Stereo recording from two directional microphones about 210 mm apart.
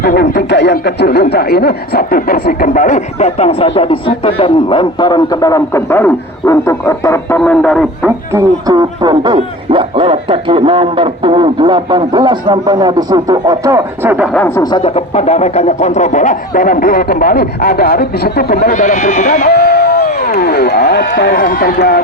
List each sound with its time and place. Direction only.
0.0 s speech: 50° left (ahead or behind); by 7.9 s 5° left (ahead or behind)
8.0 s speech: 15° right (ahead or behind)
14.3 s speech: 5° left (ahead or behind)
14.6 s a sound: 20° left (ahead or behind); by 22.0 s 45° left (ahead or behind)